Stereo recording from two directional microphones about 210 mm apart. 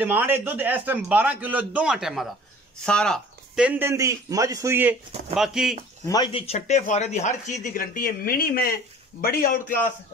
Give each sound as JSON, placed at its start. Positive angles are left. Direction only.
{"t": 0.0, "sound": "a man's voice", "side_deg": -10}
{"t": 6.0, "sound": "a man's voice", "side_deg": 20}